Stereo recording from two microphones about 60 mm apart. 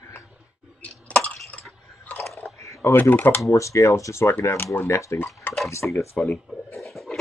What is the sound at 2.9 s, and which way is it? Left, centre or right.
Speech, left.